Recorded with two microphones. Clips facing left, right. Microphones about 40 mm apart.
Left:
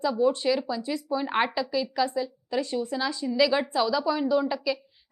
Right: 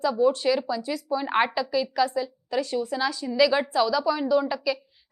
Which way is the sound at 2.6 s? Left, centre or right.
Left.